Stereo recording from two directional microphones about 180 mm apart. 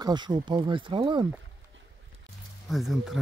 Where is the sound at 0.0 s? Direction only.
25° right (ahead or behind).